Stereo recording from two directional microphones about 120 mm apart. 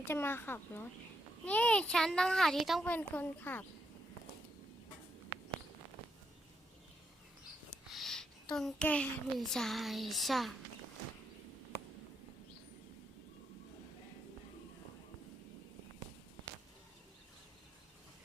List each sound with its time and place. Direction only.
0.1 s a woman's voice: 20° left (ahead or behind); by 2.8 s centre (ahead or behind)
2.8 s a woman's voice: 15° left (ahead or behind)
7.9 s a child's voice: centre (ahead or behind)